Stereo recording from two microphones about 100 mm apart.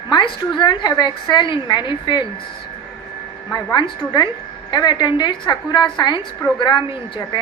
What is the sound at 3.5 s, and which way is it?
A woman's voice, 45° left (ahead or behind).